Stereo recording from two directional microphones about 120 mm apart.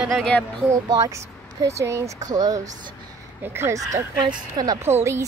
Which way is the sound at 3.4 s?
20° right (ahead or behind).